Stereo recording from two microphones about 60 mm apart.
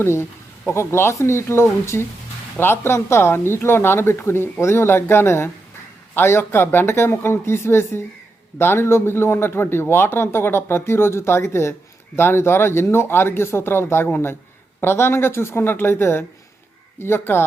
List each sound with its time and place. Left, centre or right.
0.0 s speech: left